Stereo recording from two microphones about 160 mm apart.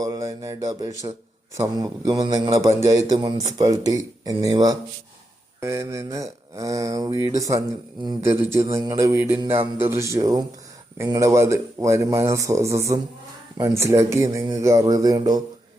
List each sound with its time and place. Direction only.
0.0 s speech: 20° right (ahead or behind)